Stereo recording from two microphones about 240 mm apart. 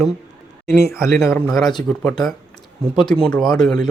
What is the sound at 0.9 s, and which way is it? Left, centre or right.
Speech, centre.